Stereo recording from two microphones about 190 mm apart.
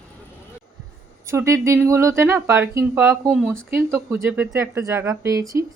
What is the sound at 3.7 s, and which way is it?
Speech, 10° right (ahead or behind).